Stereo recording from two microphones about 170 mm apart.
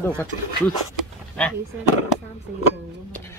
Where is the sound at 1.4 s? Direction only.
5° left (ahead or behind).